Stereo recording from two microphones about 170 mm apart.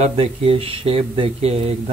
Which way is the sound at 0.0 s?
35° right (ahead or behind).